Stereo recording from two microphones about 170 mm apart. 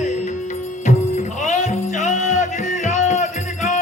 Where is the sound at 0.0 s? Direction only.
45° left (ahead or behind).